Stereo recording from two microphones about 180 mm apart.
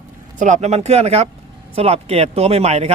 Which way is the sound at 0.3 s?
40° right (ahead or behind).